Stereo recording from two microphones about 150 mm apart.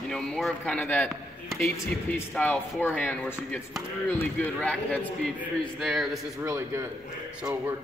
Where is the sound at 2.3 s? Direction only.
10° left (ahead or behind).